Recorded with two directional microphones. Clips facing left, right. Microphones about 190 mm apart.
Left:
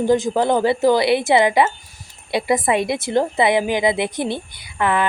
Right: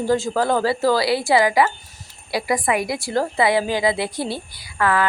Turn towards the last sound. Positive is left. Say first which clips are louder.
# left 1 dB
turn(degrees=20)  # may be behind; listen again after turning